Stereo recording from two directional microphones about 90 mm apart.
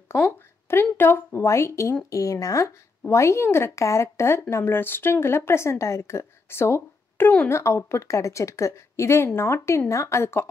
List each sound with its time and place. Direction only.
0.7 s a woman's voice: 25° left (ahead or behind)